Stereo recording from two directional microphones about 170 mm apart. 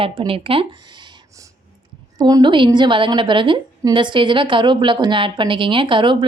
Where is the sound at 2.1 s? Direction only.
25° right (ahead or behind).